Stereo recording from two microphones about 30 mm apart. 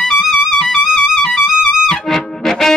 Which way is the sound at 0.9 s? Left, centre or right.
Left.